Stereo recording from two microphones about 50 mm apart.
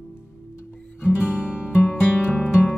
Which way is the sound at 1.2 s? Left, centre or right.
Right.